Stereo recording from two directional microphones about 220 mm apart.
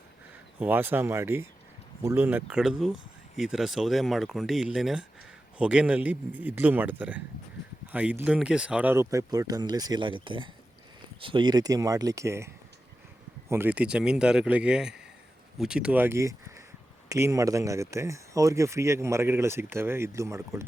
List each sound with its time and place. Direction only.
0.6 s speech: 10° right (ahead or behind)
13.5 s speech: 10° right (ahead or behind)